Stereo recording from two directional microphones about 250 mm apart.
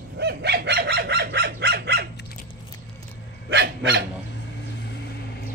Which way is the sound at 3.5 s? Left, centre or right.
Right.